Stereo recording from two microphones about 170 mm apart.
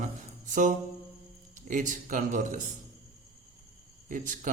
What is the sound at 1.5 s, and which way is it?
A man's voice, 50° right (ahead or behind).